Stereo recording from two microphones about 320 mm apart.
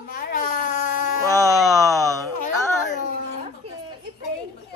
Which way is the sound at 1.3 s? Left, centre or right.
Centre.